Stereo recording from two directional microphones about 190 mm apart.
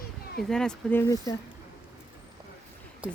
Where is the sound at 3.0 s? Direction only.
5° right (ahead or behind).